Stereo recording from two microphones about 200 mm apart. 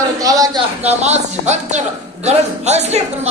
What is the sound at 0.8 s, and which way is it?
A man's voice, 35° right (ahead or behind).